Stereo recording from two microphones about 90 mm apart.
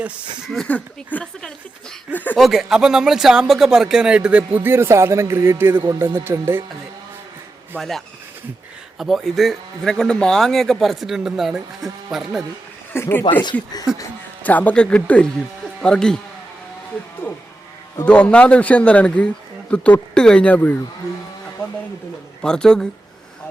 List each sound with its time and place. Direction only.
0.0 s speech: 15° right (ahead or behind)
0.4 s a man's voice: 5° left (ahead or behind); by 2.4 s 20° left (ahead or behind)
2.4 s speech: 5° right (ahead or behind); by 6.7 s 30° right (ahead or behind)
7.8 s a man's voice: 5° left (ahead or behind)
12.9 s speech: 25° left (ahead or behind)
13.4 s speech: 55° left (ahead or behind)
14.4 s a man's voice: 15° left (ahead or behind)
18.0 s a man's voice: 10° left (ahead or behind)
22.4 s a man's voice: 10° left (ahead or behind)